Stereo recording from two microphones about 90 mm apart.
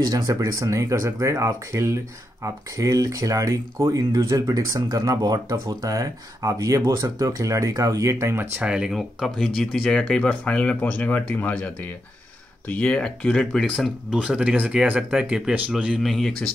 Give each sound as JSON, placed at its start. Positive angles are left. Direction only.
{"t": 0.0, "sound": "speech", "side_deg": -40}
{"t": 8.5, "sound": "speech", "side_deg": -10}
{"t": 8.9, "sound": "speech", "side_deg": 0}
{"t": 13.7, "sound": "speech", "side_deg": -5}